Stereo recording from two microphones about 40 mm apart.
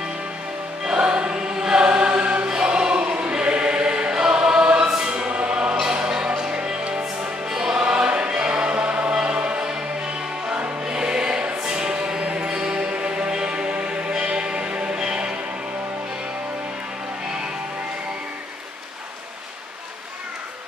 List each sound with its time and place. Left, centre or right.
0.8 s choir: right
5.8 s music: centre
9.2 s choir: right
10.9 s music: right